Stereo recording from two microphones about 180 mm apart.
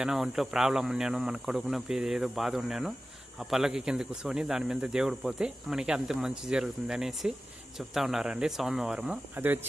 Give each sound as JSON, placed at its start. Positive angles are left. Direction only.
{"t": 0.0, "sound": "speech", "side_deg": -5}